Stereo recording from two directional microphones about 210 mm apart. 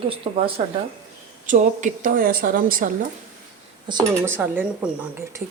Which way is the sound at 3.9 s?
15° right (ahead or behind).